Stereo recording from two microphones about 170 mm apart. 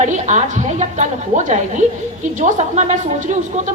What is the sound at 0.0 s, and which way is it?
Speech, 45° right (ahead or behind).